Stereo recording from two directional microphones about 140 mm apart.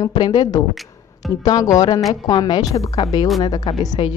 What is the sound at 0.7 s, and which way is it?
Music, centre (ahead or behind).